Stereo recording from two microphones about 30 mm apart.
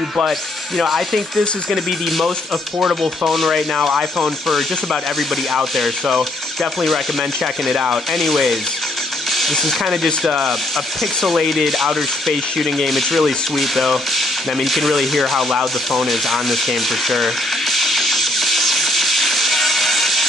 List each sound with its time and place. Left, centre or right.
1.7 s speech: centre
3.3 s speech: centre
3.7 s speech: centre
6.1 s speech: centre
8.2 s speech: centre
9.3 s a sound: centre
11.0 s speech: centre
15.6 s a sound: centre